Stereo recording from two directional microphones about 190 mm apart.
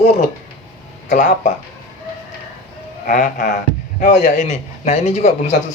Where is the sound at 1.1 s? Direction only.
40° left (ahead or behind).